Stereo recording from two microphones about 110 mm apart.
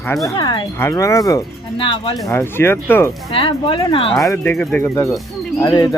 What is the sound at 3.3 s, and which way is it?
Speech, 55° left (ahead or behind).